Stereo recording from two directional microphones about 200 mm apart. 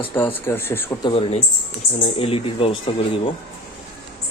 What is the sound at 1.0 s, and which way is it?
Speech, 25° left (ahead or behind).